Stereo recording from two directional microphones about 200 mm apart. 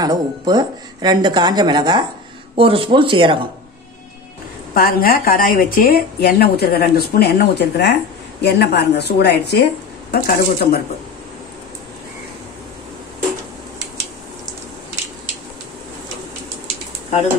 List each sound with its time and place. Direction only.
0.0 s speech: 20° right (ahead or behind)
4.7 s speech: 45° left (ahead or behind)